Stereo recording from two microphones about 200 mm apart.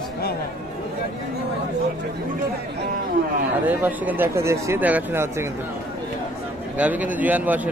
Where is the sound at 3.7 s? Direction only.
10° right (ahead or behind).